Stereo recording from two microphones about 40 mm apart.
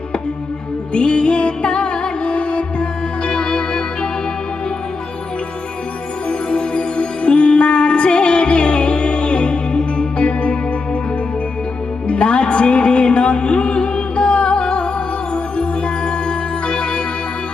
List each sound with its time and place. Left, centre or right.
0.9 s music: left
6.2 s music: left
12.0 s music: left